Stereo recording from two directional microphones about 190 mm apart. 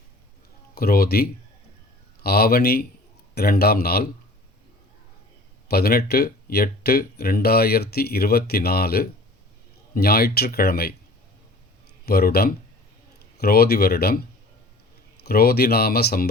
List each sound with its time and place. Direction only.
0.8 s speech: 55° left (ahead or behind)
5.6 s speech: 55° left (ahead or behind)
12.0 s speech: 55° left (ahead or behind)
15.2 s speech: 55° left (ahead or behind)